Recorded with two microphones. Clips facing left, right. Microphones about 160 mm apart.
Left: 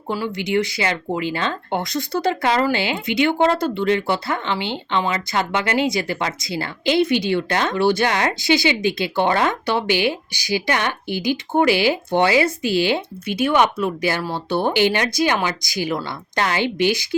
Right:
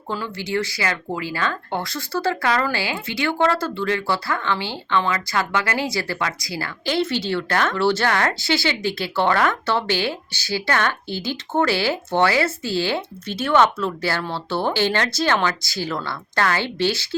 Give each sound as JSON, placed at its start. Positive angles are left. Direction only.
{"t": 0.1, "sound": "speech", "side_deg": 15}